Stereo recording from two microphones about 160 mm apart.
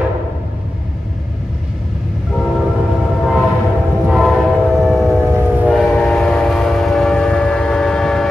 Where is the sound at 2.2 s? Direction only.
Centre (ahead or behind).